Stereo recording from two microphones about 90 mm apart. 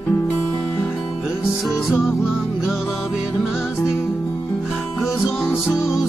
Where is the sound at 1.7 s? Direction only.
Centre (ahead or behind).